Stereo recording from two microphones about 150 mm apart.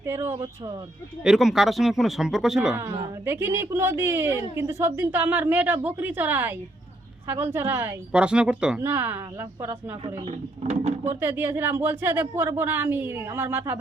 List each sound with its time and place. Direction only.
0.0 s speech: 15° right (ahead or behind)
1.2 s speech: 5° right (ahead or behind)
2.7 s speech: 15° right (ahead or behind)
10.2 s speech: 45° right (ahead or behind)
11.2 s speech: 15° right (ahead or behind)